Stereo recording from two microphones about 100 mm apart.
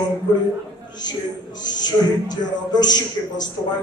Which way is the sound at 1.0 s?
45° left (ahead or behind).